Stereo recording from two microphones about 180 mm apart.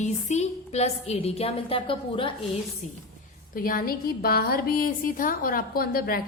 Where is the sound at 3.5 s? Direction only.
50° left (ahead or behind).